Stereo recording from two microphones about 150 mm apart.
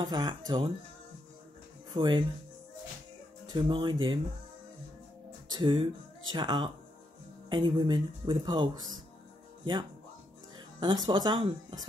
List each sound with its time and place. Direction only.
0.0 s speech: 30° right (ahead or behind)
2.0 s speech: 30° right (ahead or behind)
3.4 s speech: 35° right (ahead or behind)
5.5 s speech: 35° right (ahead or behind)
10.8 s speech: 30° right (ahead or behind)